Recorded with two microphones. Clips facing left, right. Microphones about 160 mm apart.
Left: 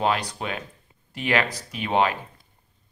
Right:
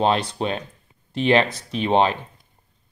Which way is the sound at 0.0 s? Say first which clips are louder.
Right 4 dB; 25° right (ahead or behind).